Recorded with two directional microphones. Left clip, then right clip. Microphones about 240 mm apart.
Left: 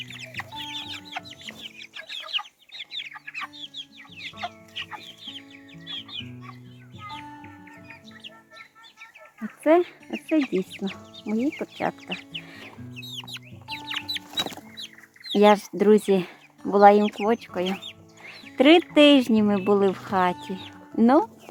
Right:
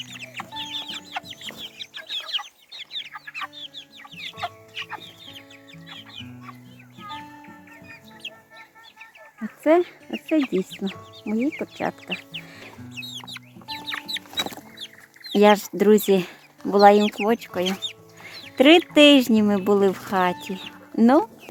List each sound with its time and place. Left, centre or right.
0.1 s chicken: left
1.3 s chicken: centre
1.8 s chicken: centre
4.4 s chicken: centre
9.6 s speech: centre
12.4 s chicken: centre
15.3 s speech: centre
18.2 s music: centre
18.5 s speech: centre
20.5 s chicken: centre